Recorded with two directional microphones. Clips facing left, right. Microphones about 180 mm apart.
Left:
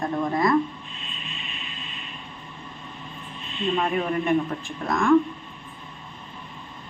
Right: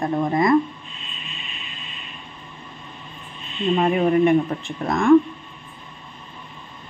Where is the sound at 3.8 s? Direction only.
20° right (ahead or behind).